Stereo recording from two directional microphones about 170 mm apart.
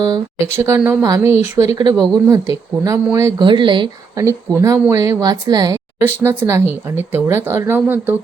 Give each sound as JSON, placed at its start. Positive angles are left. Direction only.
{"t": 0.0, "sound": "a woman's voice", "side_deg": -20}
{"t": 4.3, "sound": "a woman's voice", "side_deg": -15}